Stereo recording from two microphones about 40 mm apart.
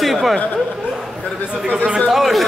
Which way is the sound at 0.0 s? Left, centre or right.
Centre.